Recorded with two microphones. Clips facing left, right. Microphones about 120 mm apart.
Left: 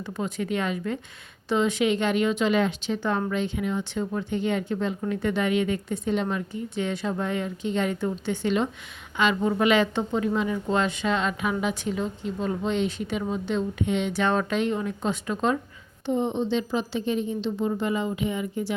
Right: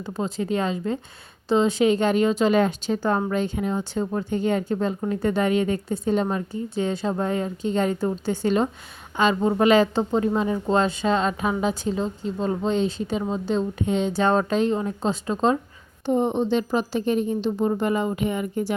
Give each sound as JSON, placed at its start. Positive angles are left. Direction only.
{"t": 0.0, "sound": "speech", "side_deg": -30}
{"t": 16.0, "sound": "a woman's voice", "side_deg": -50}